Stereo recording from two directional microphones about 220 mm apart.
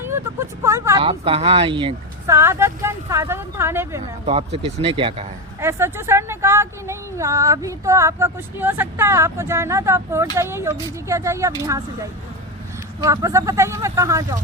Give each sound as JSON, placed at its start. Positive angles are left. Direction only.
{"t": 0.0, "sound": "a woman's voice", "side_deg": -10}
{"t": 1.0, "sound": "speech", "side_deg": -25}
{"t": 2.3, "sound": "a woman's voice", "side_deg": -10}
{"t": 4.3, "sound": "speech", "side_deg": -25}
{"t": 5.5, "sound": "a woman's voice", "side_deg": -10}
{"t": 13.0, "sound": "a woman's voice", "side_deg": -15}